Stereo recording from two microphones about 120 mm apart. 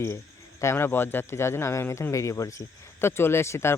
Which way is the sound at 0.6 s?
20° left (ahead or behind).